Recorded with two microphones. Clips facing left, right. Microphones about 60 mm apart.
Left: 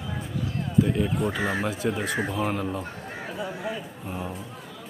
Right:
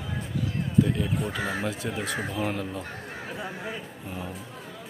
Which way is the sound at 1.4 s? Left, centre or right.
Left.